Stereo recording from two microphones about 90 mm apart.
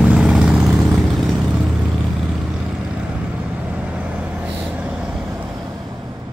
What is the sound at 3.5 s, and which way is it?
Vehicle, 15° right (ahead or behind).